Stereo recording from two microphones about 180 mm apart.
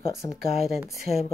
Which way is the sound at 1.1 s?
35° left (ahead or behind).